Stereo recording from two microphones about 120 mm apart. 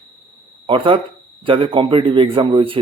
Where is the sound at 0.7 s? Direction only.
45° right (ahead or behind).